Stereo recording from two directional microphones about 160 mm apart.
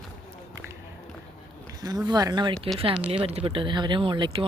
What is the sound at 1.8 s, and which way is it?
Speech, 25° right (ahead or behind).